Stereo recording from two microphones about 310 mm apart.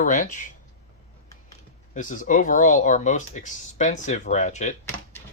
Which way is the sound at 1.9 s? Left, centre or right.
Left.